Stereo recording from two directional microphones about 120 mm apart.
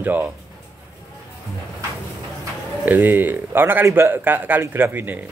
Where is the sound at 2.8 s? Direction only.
15° right (ahead or behind).